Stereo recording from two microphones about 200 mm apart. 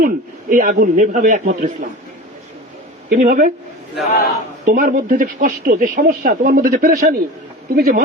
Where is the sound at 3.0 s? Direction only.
45° right (ahead or behind).